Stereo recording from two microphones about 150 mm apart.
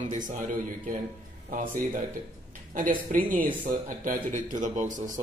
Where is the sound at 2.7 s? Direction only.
65° right (ahead or behind).